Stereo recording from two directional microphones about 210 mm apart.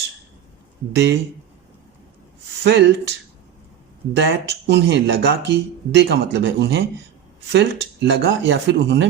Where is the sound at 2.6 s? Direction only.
55° right (ahead or behind).